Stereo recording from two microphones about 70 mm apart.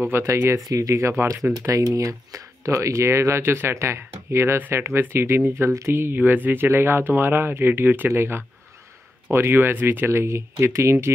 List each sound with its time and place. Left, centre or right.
0.3 s speech: right
0.7 s speech: right